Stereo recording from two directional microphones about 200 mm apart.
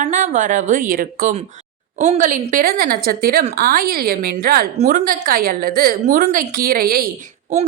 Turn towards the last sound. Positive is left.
turn(degrees=-45)  # may be behind; listen again after turning